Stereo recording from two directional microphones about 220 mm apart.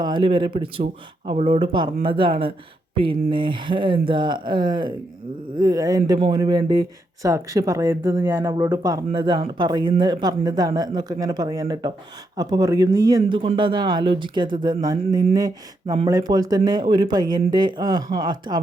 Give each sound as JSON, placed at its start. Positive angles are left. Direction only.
{"t": 0.0, "sound": "a man's voice", "side_deg": -20}